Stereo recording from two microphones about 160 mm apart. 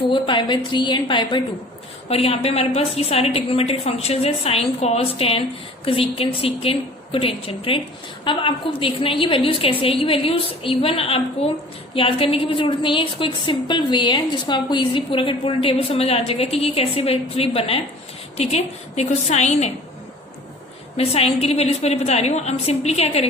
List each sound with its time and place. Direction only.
0.1 s a woman's voice: 30° left (ahead or behind)
20.9 s a woman's voice: 40° left (ahead or behind)